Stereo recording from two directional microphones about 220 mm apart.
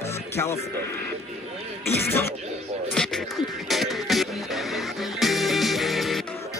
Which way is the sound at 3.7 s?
Centre (ahead or behind).